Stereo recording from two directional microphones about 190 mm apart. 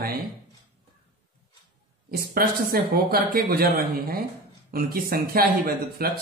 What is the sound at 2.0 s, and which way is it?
Speech, 50° right (ahead or behind).